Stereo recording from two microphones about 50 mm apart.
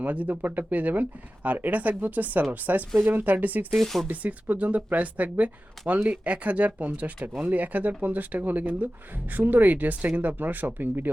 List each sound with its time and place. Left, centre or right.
0.0 s speech: right
3.7 s speech: centre
4.1 s speech: right